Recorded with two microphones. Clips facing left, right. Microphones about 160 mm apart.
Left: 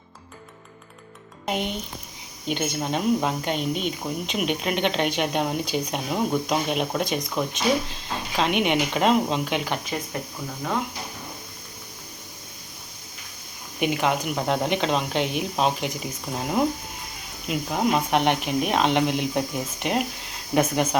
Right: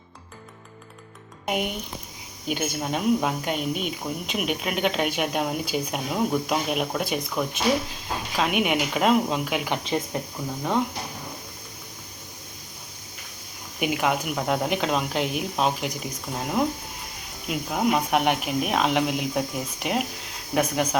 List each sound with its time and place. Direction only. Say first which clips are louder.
1.5 s speech: even; 10° right (ahead or behind)
9.6 s speech: right 2 dB; 20° right (ahead or behind)
13.7 s speech: left 1 dB; 5° right (ahead or behind)